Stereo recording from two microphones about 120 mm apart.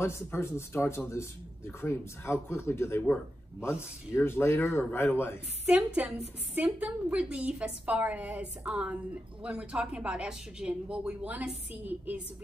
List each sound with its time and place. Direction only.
0.0 s a man's voice: 20° left (ahead or behind)
5.7 s a woman's voice: 10° right (ahead or behind)